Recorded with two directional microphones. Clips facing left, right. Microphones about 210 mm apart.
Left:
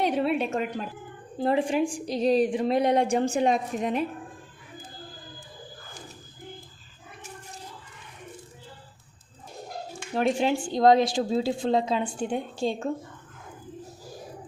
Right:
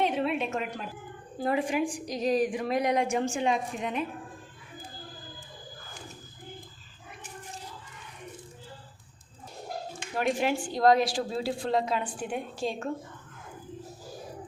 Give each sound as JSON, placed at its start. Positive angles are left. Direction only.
{"t": 0.2, "sound": "a sound", "side_deg": 35}
{"t": 1.4, "sound": "a woman's voice", "side_deg": 30}
{"t": 10.2, "sound": "a woman's voice", "side_deg": 25}